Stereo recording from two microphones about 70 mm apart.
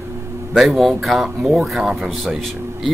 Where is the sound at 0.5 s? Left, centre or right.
Centre.